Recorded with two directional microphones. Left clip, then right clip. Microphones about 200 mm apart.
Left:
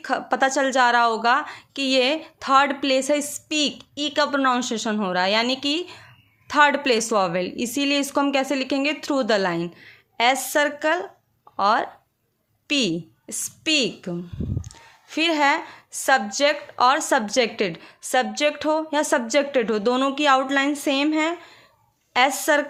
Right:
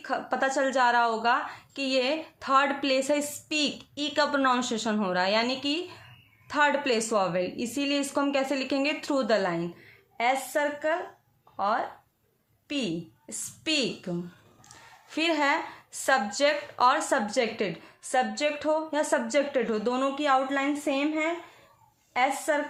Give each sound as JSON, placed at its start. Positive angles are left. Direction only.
{"t": 0.0, "sound": "a woman's voice", "side_deg": 35}